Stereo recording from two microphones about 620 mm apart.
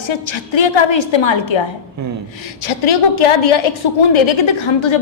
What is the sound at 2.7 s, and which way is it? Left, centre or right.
A woman's voice, left.